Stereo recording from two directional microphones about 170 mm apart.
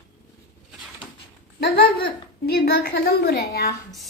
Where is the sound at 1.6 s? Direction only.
70° left (ahead or behind).